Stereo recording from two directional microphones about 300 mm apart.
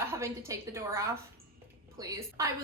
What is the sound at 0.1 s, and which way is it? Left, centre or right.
A woman's voice, centre.